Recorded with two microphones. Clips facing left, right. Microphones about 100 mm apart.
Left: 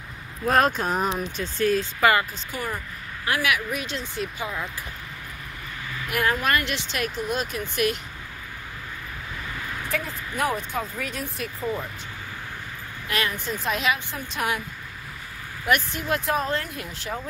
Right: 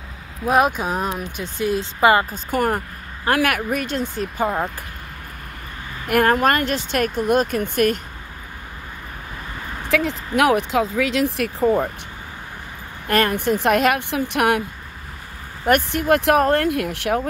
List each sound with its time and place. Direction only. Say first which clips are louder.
0.5 s speech: right 3 dB; 10° right (ahead or behind)
2.3 s speech: right 10 dB; 55° right (ahead or behind)
6.0 s speech: right 8 dB; 50° right (ahead or behind)
9.8 s speech: right 11 dB; 85° right; by 11.9 s 65° right (ahead or behind)
13.0 s speech: right 9 dB; 50° right (ahead or behind)
13.3 s speech: right 10 dB; 65° right (ahead or behind)
15.6 s speech: right 6 dB; 50° right (ahead or behind); by 17.3 s 80° right